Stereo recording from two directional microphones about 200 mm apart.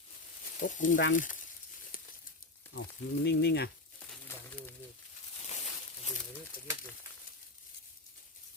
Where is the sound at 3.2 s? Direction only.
55° left (ahead or behind).